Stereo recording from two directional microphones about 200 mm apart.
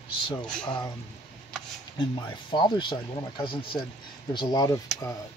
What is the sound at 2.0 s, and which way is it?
Speech, 20° left (ahead or behind).